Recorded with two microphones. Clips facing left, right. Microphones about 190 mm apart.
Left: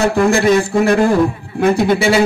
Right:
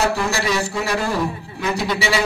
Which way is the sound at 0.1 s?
55° left (ahead or behind).